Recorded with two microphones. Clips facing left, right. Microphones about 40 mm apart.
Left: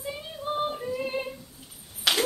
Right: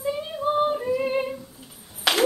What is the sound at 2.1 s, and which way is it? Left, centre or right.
Ping, centre.